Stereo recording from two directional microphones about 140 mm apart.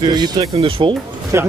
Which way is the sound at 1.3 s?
20° right (ahead or behind).